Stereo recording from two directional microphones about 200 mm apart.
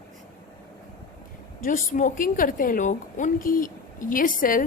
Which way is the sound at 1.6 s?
40° left (ahead or behind).